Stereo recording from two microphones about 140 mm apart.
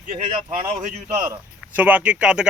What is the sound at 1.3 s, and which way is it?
Speech, 10° right (ahead or behind).